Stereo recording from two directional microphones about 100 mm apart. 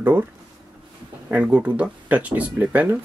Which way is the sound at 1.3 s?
15° right (ahead or behind).